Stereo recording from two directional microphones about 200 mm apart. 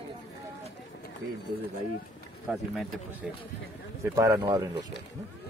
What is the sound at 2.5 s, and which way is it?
A man's voice, centre (ahead or behind).